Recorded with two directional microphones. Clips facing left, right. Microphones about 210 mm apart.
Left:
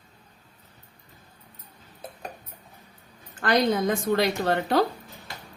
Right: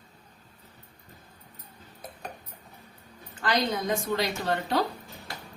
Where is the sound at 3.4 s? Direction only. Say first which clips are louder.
Left 5 dB; 55° left (ahead or behind).